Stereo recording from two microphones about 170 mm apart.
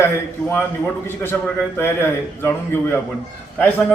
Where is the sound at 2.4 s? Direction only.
15° left (ahead or behind).